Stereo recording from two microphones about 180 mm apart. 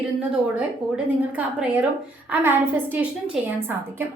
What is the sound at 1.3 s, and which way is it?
A child's voice, 10° right (ahead or behind).